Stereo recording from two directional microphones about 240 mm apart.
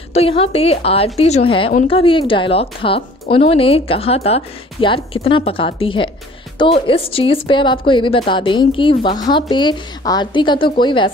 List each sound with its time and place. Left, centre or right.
0.1 s a woman's voice: left